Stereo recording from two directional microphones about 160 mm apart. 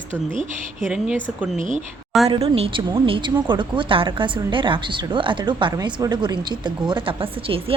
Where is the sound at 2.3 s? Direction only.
40° right (ahead or behind).